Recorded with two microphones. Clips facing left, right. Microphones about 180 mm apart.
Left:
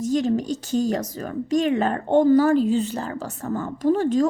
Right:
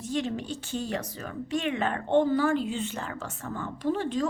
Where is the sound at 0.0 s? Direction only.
40° left (ahead or behind).